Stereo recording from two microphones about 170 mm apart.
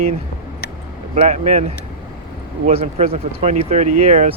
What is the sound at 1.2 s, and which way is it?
Speech, 45° right (ahead or behind).